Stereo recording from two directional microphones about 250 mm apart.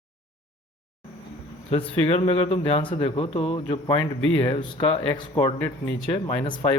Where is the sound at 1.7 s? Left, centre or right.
Left.